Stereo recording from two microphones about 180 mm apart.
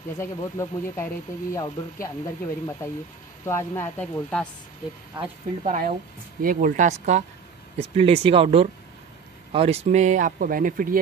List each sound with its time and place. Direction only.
0.2 s speech: 15° left (ahead or behind)
5.6 s speech: 50° right (ahead or behind)